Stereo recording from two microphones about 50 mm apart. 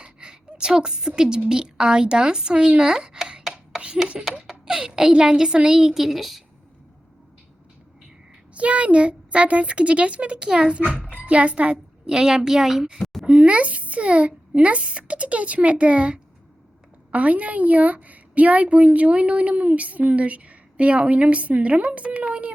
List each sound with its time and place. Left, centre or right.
0.0 s a sound: centre
1.5 s speech: centre
3.8 s a sound: centre
4.4 s a woman's voice: centre
8.5 s a woman's voice: right; by 13.0 s centre
13.2 s a woman's voice: right